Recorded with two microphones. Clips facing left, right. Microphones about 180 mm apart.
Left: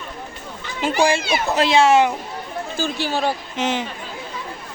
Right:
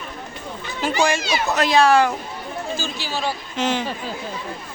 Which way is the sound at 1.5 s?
25° left (ahead or behind).